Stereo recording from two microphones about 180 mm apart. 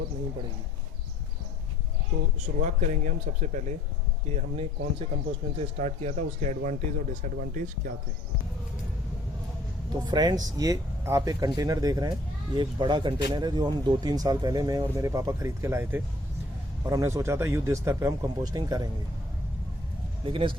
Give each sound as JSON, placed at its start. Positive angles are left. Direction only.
{"t": 2.6, "sound": "speech", "side_deg": -40}
{"t": 10.0, "sound": "speech", "side_deg": -25}
{"t": 20.2, "sound": "speech", "side_deg": -30}